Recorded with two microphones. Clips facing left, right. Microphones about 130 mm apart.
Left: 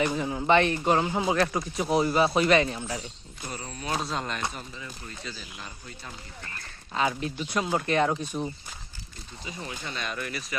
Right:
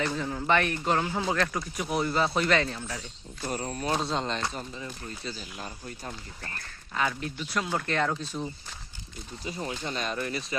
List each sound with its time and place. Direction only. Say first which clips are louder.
0.0 s a man's voice: left 3 dB; 15° left (ahead or behind)
1.5 s speech: left 4 dB; 25° left (ahead or behind)
3.4 s speech: right 5 dB; 45° right (ahead or behind)
4.0 s speech: right 2 dB; 25° right (ahead or behind)
6.9 s speech: left 3 dB; 20° left (ahead or behind)
9.4 s speech: right 4 dB; 45° right (ahead or behind); by 10.6 s 30° right (ahead or behind)